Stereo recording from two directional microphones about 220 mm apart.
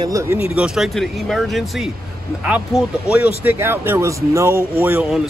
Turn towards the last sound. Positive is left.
turn(degrees=-5)  # may be behind; listen again after turning